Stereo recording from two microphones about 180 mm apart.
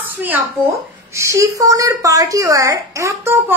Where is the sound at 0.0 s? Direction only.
10° right (ahead or behind).